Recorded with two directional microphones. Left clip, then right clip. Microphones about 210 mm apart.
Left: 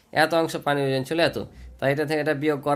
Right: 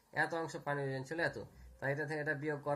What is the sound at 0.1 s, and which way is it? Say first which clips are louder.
Speech: left 16 dB; 45° left (ahead or behind).